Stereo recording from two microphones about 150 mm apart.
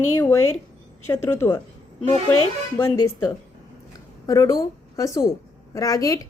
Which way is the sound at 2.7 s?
15° left (ahead or behind).